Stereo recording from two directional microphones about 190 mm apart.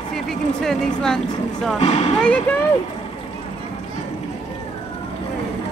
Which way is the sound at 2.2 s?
10° left (ahead or behind).